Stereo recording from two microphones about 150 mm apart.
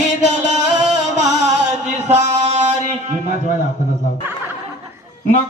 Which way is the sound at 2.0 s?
50° right (ahead or behind).